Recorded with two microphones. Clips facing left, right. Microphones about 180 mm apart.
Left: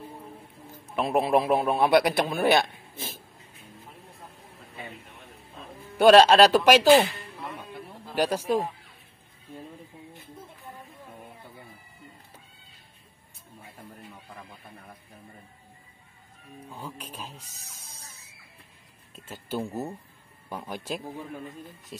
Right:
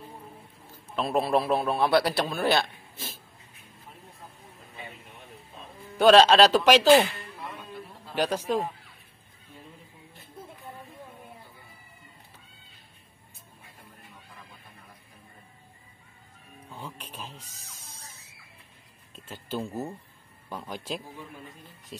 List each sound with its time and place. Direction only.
0.9 s a man's voice: 15° left (ahead or behind)
5.9 s a man's voice: 10° left (ahead or behind)
8.1 s a man's voice: 10° left (ahead or behind)
16.7 s music: 10° left (ahead or behind)
17.4 s a sound: 10° left (ahead or behind)
19.1 s a man's voice: 10° left (ahead or behind)